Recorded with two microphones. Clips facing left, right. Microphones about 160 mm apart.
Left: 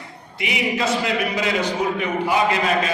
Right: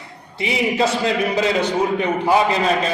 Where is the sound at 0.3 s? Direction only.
30° right (ahead or behind).